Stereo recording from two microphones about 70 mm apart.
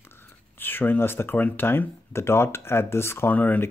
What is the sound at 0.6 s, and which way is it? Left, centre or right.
Speech, left.